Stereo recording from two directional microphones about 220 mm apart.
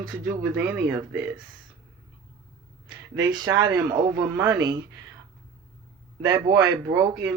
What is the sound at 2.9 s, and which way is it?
Speech, 20° right (ahead or behind).